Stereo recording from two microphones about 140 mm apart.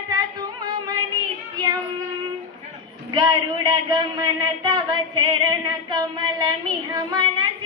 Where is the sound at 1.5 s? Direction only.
30° right (ahead or behind).